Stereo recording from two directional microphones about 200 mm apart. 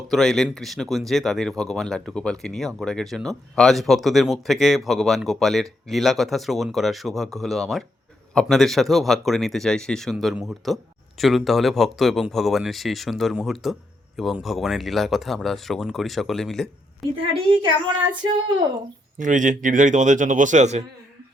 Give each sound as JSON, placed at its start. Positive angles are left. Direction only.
{"t": 0.1, "sound": "speech", "side_deg": 0}
{"t": 17.5, "sound": "a woman's voice", "side_deg": -25}
{"t": 19.2, "sound": "a man's voice", "side_deg": -40}